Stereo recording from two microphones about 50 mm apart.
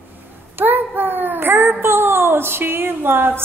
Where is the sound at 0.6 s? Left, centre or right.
Right.